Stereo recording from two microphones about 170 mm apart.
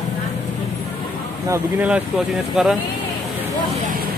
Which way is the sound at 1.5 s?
10° right (ahead or behind).